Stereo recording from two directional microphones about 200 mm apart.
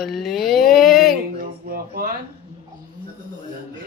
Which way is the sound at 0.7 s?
Centre (ahead or behind).